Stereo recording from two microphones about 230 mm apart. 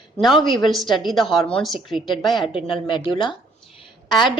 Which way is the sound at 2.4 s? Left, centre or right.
Left.